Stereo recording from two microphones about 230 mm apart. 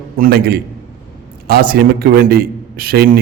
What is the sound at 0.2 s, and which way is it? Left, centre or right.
A man's voice, right.